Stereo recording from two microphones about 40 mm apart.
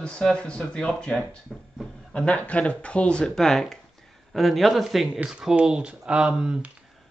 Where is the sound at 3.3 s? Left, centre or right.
Centre.